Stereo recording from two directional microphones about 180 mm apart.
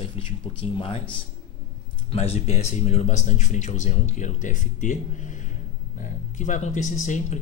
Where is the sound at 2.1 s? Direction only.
35° left (ahead or behind).